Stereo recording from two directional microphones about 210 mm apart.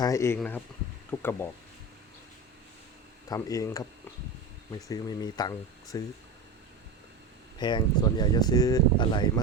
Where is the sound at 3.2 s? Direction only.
15° left (ahead or behind).